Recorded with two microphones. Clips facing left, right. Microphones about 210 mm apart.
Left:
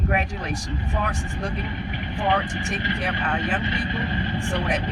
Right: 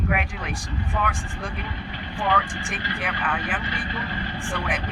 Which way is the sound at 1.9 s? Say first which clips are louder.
Left 1 dB; 20° left (ahead or behind).